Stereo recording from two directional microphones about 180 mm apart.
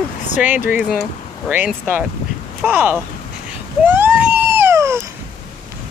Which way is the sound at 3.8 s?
10° right (ahead or behind).